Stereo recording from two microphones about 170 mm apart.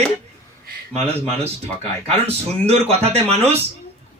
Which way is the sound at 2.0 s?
35° right (ahead or behind).